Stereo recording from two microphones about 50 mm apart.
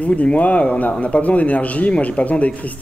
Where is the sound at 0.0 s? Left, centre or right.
Left.